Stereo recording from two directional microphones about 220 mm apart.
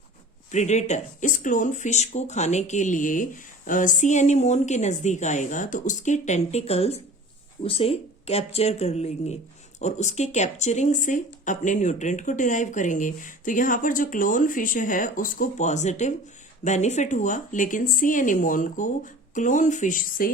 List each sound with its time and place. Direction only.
0.5 s speech: 30° left (ahead or behind)